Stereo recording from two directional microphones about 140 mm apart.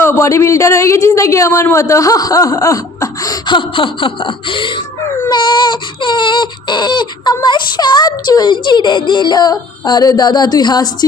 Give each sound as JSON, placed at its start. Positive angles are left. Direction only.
{"t": 0.0, "sound": "a man's voice", "side_deg": 20}
{"t": 5.3, "sound": "baby cry", "side_deg": 35}